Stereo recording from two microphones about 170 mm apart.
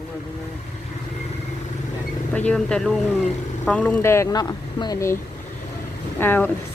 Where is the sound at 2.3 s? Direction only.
5° left (ahead or behind).